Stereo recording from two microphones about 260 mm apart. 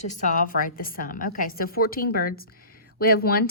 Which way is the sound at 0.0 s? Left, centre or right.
Left.